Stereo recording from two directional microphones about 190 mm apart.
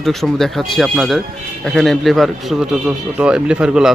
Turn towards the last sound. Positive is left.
turn(degrees=-5)  # may be behind; listen again after turning